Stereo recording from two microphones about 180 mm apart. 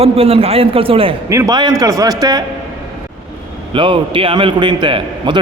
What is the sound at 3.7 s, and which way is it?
A man's voice, 30° right (ahead or behind).